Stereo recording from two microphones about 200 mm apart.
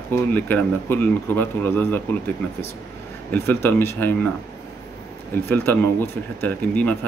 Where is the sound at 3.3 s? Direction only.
10° left (ahead or behind).